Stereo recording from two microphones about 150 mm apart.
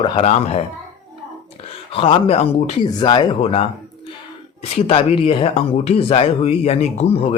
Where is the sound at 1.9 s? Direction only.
40° left (ahead or behind).